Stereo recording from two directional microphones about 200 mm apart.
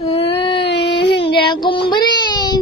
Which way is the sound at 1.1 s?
25° left (ahead or behind).